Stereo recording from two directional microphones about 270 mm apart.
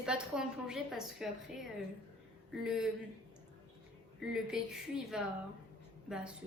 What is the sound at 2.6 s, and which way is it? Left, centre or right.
Speech, centre.